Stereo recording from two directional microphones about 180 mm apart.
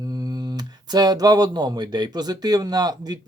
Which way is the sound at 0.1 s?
20° right (ahead or behind).